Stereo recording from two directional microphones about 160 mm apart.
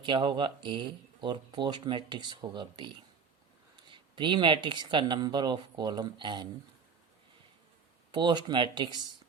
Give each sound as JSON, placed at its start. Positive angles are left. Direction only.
{"t": 0.0, "sound": "speech", "side_deg": -30}
{"t": 3.9, "sound": "speech", "side_deg": -30}
{"t": 8.1, "sound": "speech", "side_deg": -30}